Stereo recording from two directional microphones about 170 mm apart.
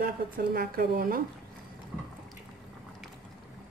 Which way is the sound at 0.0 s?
65° right (ahead or behind).